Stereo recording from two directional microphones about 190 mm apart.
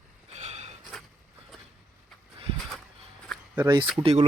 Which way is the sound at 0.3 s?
35° right (ahead or behind).